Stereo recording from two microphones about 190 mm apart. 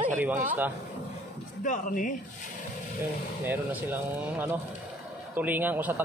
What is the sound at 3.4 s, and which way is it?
Speech, 10° right (ahead or behind).